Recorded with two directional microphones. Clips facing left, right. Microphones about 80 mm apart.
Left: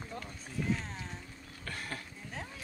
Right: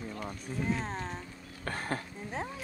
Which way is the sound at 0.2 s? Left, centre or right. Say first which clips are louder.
Right 5 dB; right.